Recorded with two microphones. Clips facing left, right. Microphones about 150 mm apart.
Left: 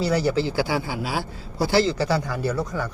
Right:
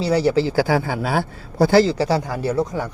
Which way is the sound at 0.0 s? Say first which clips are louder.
Right 4 dB; 30° right (ahead or behind).